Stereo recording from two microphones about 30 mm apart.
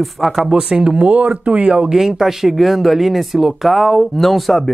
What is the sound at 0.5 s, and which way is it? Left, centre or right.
Speech, right.